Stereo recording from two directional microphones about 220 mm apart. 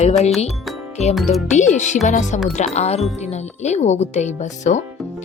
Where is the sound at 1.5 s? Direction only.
35° left (ahead or behind).